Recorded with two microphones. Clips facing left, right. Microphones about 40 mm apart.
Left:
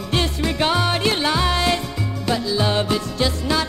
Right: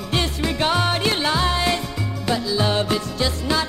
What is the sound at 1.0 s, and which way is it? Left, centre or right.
Music, centre.